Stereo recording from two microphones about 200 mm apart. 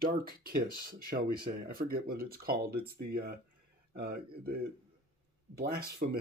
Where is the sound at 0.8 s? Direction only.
45° right (ahead or behind).